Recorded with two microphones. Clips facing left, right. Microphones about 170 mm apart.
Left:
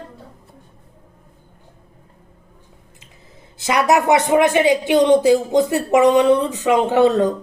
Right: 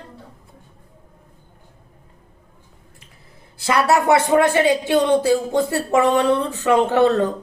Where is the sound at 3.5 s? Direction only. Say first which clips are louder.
Left 1 dB; 20° left (ahead or behind).